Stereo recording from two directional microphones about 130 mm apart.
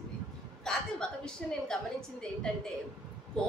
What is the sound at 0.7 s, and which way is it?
A woman's voice, 5° left (ahead or behind).